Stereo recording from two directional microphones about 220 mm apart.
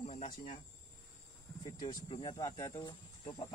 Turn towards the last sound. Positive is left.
turn(degrees=20)  # may be behind; listen again after turning